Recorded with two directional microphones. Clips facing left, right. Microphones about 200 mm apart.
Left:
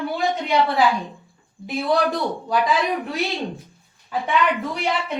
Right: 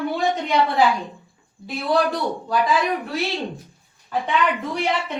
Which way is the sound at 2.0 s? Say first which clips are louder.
Left 1 dB; 15° left (ahead or behind).